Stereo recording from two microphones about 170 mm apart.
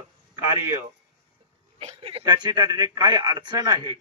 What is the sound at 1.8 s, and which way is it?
Speech, 35° right (ahead or behind).